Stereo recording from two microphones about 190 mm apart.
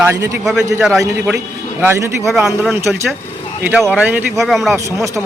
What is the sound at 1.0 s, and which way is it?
Speech, 15° right (ahead or behind).